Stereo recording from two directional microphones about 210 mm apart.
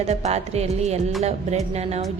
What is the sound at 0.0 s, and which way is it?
A woman's voice, 30° right (ahead or behind).